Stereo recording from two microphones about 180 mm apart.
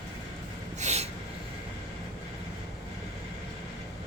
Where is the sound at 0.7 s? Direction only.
40° right (ahead or behind).